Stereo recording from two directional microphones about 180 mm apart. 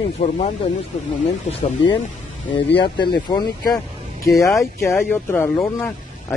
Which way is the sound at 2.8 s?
25° left (ahead or behind).